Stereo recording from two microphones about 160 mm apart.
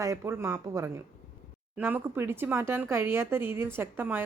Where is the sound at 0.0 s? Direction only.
20° right (ahead or behind).